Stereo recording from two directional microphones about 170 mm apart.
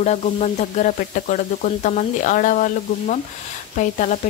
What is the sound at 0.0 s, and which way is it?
Speech, 40° left (ahead or behind).